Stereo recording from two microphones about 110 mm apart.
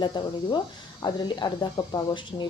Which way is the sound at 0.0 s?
40° left (ahead or behind).